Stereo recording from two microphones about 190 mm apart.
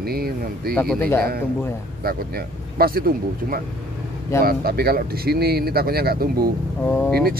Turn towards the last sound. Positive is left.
turn(degrees=10)  # may be behind; listen again after turning